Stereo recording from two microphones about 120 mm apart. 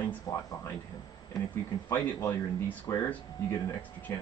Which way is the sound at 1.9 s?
15° left (ahead or behind).